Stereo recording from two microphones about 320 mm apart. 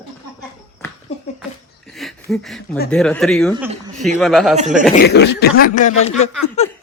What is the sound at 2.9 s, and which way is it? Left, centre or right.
Speech, centre.